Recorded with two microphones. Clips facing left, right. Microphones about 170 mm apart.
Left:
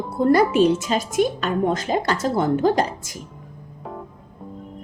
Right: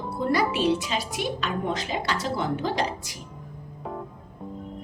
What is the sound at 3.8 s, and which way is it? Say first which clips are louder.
Music: even; centre (ahead or behind).